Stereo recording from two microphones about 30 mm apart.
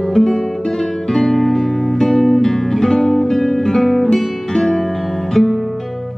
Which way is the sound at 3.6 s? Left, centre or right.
Centre.